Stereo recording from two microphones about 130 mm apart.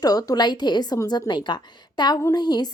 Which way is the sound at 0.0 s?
30° left (ahead or behind).